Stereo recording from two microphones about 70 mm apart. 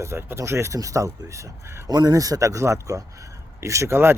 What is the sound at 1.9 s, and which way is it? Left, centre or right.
A man's voice, right.